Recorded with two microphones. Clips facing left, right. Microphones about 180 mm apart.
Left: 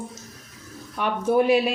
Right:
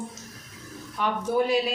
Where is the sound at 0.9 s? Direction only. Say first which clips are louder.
Left 4 dB; 60° left (ahead or behind).